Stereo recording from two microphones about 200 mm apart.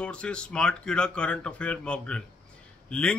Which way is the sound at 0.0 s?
5° left (ahead or behind).